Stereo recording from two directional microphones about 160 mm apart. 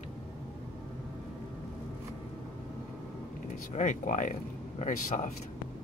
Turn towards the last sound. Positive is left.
turn(degrees=55)  # may be behind; listen again after turning